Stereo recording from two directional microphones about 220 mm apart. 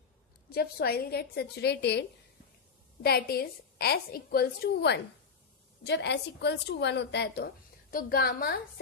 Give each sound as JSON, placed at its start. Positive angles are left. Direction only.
{"t": 0.5, "sound": "a woman's voice", "side_deg": 45}